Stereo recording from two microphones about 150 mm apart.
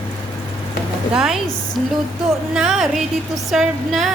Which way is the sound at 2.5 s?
5° right (ahead or behind).